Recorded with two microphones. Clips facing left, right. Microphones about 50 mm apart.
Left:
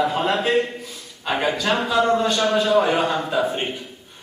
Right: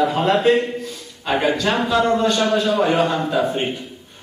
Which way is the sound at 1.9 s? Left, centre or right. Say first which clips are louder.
Right 1 dB; centre.